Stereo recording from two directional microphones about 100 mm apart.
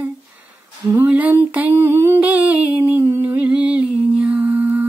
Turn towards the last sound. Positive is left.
turn(degrees=-15)  # may be behind; listen again after turning